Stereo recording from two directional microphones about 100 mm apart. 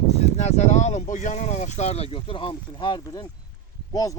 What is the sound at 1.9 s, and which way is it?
Speech, 80° left.